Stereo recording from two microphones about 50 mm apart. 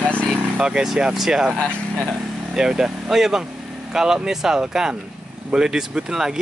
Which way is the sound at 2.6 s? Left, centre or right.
Centre.